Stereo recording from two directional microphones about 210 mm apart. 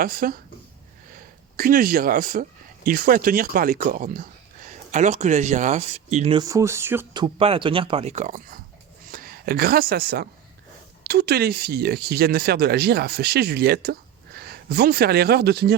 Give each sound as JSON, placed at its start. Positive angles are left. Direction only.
{"t": 0.0, "sound": "speech", "side_deg": -45}
{"t": 1.5, "sound": "speech", "side_deg": -40}
{"t": 6.4, "sound": "speech", "side_deg": -15}